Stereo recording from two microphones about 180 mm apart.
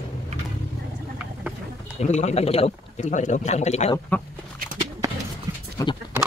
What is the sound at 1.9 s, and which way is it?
Speech, 40° left (ahead or behind).